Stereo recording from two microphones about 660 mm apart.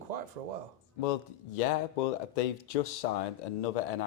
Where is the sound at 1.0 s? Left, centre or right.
Left.